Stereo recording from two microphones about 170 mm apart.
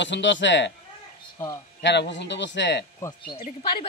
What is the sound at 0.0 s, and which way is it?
Speech, 90° left.